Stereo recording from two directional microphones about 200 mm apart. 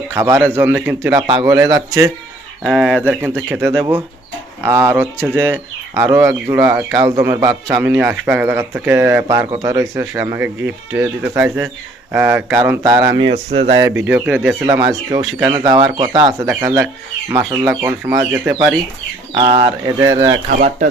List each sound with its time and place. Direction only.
0.1 s a man's voice: 15° right (ahead or behind)
2.6 s a man's voice: 5° right (ahead or behind); by 14.0 s 20° right (ahead or behind)
14.1 s a man's voice: 10° right (ahead or behind)
19.3 s speech: 20° right (ahead or behind)